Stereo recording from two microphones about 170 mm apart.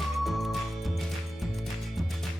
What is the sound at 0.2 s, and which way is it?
Music, centre (ahead or behind).